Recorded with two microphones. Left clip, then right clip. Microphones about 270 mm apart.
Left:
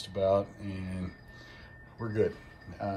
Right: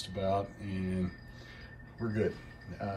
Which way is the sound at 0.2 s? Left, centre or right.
Centre.